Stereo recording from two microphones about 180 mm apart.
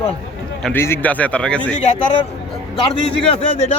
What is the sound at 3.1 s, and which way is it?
Speech, 30° left (ahead or behind).